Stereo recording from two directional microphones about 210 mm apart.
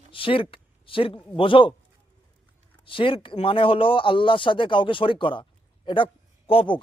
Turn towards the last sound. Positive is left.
turn(degrees=25)  # may be behind; listen again after turning